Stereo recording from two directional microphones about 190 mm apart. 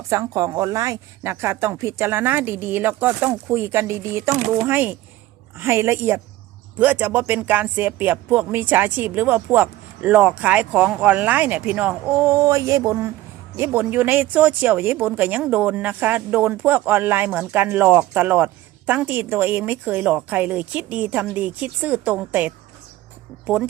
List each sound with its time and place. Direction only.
0.1 s speech: 15° right (ahead or behind)
4.4 s speech: 40° right (ahead or behind)
4.6 s speech: 10° right (ahead or behind)